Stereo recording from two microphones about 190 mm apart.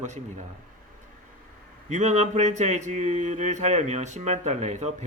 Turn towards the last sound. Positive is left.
turn(degrees=-40)  # may be behind; listen again after turning